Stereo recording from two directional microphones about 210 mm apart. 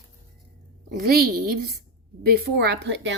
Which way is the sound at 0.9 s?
45° right (ahead or behind).